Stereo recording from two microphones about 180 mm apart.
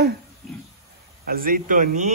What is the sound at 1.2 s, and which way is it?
Speech, 55° right (ahead or behind).